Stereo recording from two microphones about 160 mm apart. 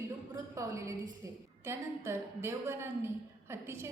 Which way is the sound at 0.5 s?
20° right (ahead or behind).